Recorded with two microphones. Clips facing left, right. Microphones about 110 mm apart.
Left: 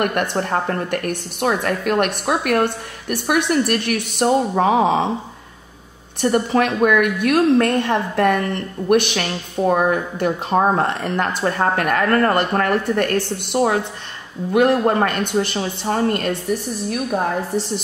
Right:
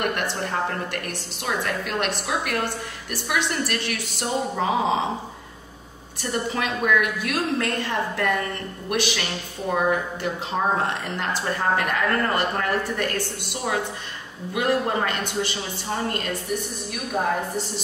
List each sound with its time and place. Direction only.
0.0 s a woman's voice: 55° left (ahead or behind)
6.2 s a woman's voice: 55° left (ahead or behind)